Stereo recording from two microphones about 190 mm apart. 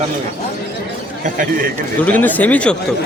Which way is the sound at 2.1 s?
10° left (ahead or behind).